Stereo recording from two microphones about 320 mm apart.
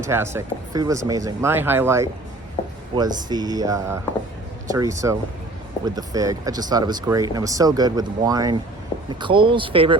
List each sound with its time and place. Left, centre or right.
0.1 s speech: centre